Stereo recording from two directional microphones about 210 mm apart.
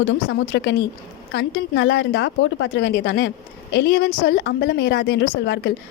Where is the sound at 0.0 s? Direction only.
60° left (ahead or behind).